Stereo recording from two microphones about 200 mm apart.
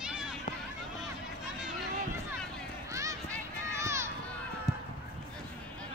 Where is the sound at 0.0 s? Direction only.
5° right (ahead or behind).